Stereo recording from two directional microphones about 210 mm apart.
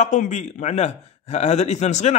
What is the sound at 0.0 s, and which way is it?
A man's voice, 35° left (ahead or behind).